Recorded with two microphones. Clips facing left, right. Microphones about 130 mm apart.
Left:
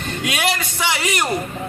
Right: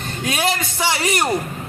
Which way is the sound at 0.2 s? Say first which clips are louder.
Right 2 dB; 30° right (ahead or behind).